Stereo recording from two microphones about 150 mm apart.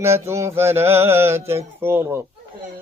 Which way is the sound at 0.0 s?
20° right (ahead or behind).